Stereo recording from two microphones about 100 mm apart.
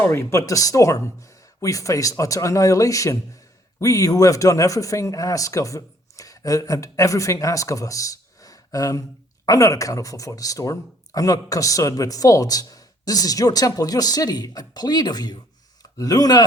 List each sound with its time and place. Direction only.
0.0 s speech: 25° left (ahead or behind)